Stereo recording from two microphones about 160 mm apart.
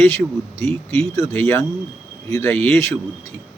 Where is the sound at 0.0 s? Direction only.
15° left (ahead or behind).